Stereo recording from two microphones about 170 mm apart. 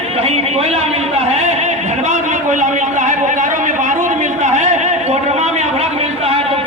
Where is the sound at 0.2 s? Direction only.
40° right (ahead or behind).